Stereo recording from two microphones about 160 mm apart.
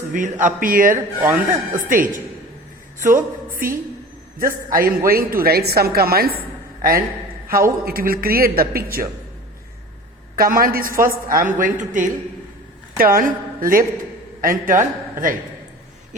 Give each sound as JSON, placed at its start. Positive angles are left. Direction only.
{"t": 0.1, "sound": "a woman's voice", "side_deg": -50}
{"t": 1.2, "sound": "a man's voice", "side_deg": -15}
{"t": 1.9, "sound": "a woman's voice", "side_deg": -60}
{"t": 7.4, "sound": "a woman's voice", "side_deg": -65}
{"t": 10.3, "sound": "a woman's voice", "side_deg": -65}
{"t": 13.1, "sound": "a woman's voice", "side_deg": -60}